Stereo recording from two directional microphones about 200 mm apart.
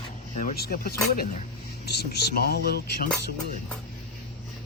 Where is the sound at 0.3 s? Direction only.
45° left (ahead or behind).